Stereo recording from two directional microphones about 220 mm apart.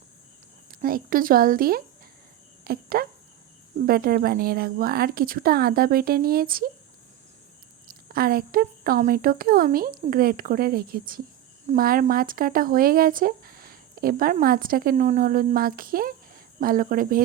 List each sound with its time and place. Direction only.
0.7 s a woman's voice: 40° right (ahead or behind)
7.9 s speech: 40° right (ahead or behind)